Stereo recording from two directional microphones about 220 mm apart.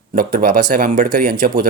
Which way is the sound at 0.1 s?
40° right (ahead or behind).